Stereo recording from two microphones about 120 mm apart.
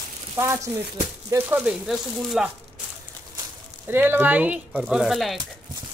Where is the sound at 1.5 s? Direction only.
5° right (ahead or behind).